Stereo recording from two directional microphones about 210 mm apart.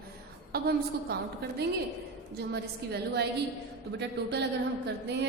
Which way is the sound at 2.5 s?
50° right (ahead or behind).